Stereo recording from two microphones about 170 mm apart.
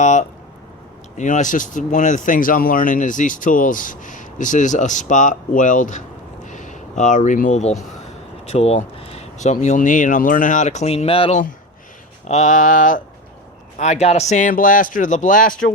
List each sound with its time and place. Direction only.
0.0 s speech: 45° left (ahead or behind)
6.4 s a sound: 45° left (ahead or behind)
8.4 s speech: 35° left (ahead or behind)
12.3 s speech: 45° left (ahead or behind)